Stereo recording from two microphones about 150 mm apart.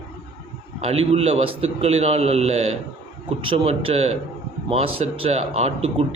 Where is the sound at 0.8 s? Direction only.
40° right (ahead or behind).